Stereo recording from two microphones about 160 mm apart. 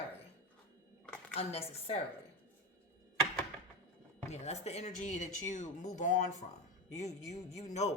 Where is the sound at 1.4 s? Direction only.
40° left (ahead or behind).